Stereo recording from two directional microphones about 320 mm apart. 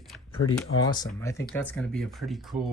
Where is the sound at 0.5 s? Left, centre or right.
Centre.